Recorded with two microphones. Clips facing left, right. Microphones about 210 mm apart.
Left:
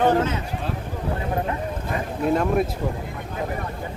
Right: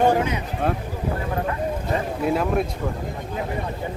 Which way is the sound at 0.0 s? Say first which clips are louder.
Even; 15° right (ahead or behind).